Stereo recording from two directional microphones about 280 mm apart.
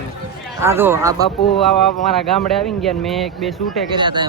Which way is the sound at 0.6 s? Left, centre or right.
Centre.